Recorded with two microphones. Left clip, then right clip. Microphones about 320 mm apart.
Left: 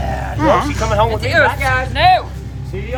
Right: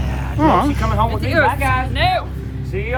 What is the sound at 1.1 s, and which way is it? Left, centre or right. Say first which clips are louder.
Speech: left 3 dB; left.